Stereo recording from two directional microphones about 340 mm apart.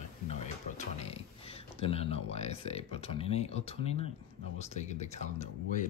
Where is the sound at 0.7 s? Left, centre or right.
Centre.